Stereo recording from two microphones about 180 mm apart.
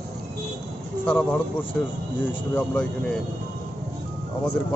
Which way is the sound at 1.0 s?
5° left (ahead or behind).